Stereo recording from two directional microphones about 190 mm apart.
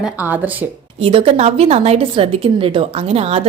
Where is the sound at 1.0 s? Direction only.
30° right (ahead or behind).